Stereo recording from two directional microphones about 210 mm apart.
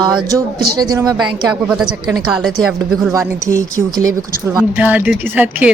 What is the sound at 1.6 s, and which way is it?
Speech, 5° right (ahead or behind).